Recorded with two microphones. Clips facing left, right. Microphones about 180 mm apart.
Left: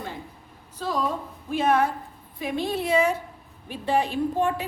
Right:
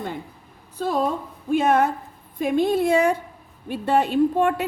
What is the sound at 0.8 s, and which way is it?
A woman's voice, 55° right (ahead or behind).